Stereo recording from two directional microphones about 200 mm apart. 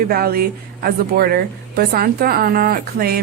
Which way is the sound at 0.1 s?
50° right (ahead or behind).